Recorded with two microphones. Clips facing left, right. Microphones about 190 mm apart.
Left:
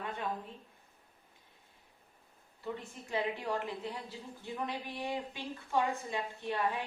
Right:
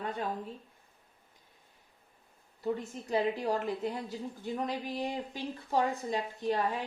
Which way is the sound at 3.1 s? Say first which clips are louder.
Right 5 dB; 35° right (ahead or behind).